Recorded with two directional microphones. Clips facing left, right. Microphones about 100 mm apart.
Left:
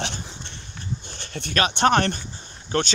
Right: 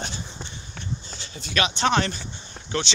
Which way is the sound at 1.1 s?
60° left (ahead or behind).